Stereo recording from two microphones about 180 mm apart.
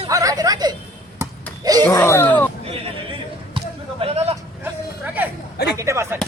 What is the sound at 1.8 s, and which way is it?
Speech, 15° left (ahead or behind).